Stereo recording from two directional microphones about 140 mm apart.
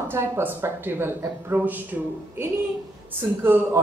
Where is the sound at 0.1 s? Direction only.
15° right (ahead or behind).